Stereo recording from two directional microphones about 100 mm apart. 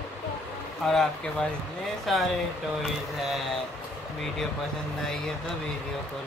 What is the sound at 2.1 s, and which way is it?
Speech, centre (ahead or behind).